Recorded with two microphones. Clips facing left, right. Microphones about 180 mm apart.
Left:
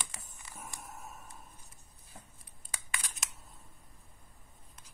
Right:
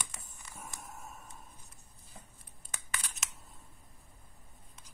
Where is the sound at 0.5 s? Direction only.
5° left (ahead or behind).